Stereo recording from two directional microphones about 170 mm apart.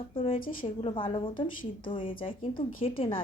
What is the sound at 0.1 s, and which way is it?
A woman's voice, 30° left (ahead or behind).